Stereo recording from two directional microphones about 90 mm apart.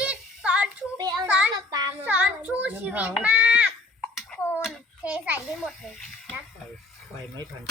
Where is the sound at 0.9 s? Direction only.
45° right (ahead or behind).